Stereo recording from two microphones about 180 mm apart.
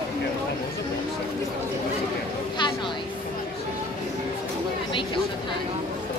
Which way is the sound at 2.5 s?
25° left (ahead or behind).